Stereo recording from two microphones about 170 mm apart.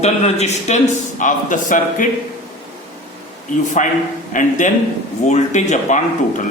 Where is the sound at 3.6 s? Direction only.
45° left (ahead or behind).